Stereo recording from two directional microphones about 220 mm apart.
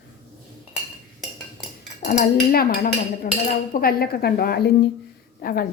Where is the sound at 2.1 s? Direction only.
40° left (ahead or behind).